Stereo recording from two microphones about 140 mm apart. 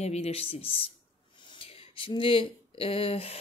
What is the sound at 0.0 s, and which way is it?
Speech, 50° left (ahead or behind).